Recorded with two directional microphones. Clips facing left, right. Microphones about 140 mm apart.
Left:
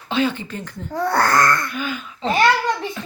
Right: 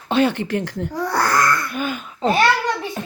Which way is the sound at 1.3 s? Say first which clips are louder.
Even; 35° left (ahead or behind).